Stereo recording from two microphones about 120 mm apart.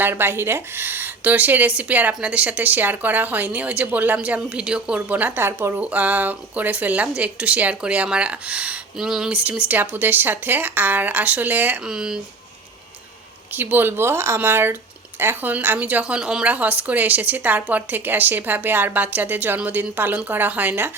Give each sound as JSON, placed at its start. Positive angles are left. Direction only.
{"t": 0.0, "sound": "speech", "side_deg": -20}
{"t": 13.5, "sound": "speech", "side_deg": -15}